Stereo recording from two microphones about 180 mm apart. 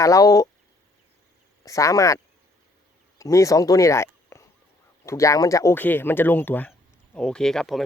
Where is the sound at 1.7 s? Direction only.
15° left (ahead or behind).